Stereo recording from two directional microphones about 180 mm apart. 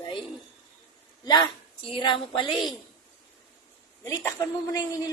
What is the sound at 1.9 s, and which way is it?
Speech, 25° left (ahead or behind).